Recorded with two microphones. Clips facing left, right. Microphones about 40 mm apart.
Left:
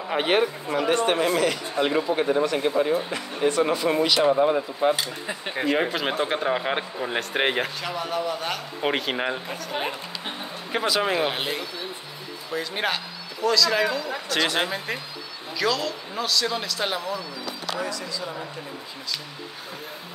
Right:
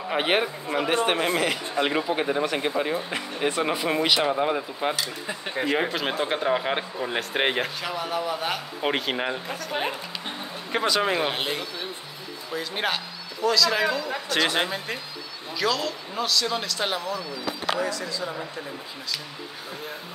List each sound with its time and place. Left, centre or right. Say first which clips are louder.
0.1 s speech: left 2 dB; centre
5.2 s speech: left 1 dB; centre